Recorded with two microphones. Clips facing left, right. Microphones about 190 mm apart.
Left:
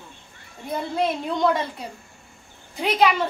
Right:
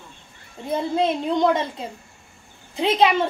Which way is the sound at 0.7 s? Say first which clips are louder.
Right 3 dB; 20° right (ahead or behind).